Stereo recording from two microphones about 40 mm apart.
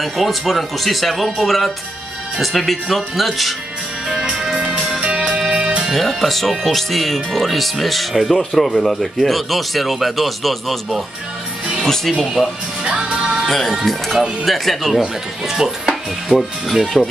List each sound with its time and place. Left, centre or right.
0.0 s speech: centre
4.2 s music: centre
5.9 s speech: centre
12.8 s music: centre
13.5 s speech: centre